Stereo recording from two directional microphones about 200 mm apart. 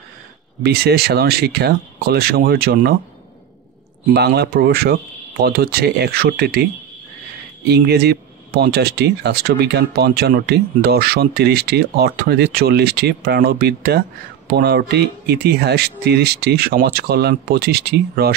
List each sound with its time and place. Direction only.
0.7 s speech: 50° right (ahead or behind)
4.1 s speech: 55° right (ahead or behind)
7.6 s speech: 55° right (ahead or behind)